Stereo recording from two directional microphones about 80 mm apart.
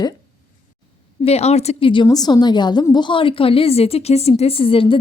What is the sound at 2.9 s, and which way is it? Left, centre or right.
Speech, left.